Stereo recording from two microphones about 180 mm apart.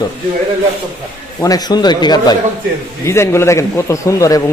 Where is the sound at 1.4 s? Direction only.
20° left (ahead or behind).